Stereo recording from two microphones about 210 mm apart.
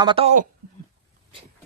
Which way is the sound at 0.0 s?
25° right (ahead or behind).